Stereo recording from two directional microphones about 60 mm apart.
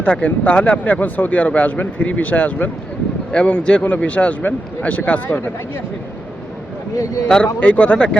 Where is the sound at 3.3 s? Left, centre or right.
Centre.